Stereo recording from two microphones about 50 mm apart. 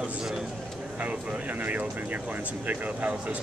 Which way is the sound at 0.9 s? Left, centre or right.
Right.